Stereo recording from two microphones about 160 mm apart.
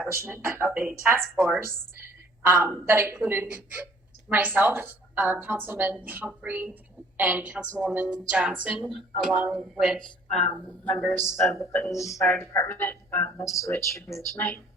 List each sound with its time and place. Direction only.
0.1 s a woman's voice: 15° right (ahead or behind); by 14.6 s 10° left (ahead or behind)